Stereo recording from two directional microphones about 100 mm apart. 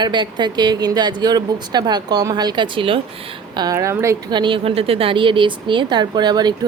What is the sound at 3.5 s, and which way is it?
Speech, 45° right (ahead or behind).